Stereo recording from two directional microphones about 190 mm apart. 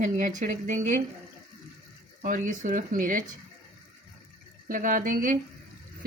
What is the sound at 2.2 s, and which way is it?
Speech, 45° right (ahead or behind).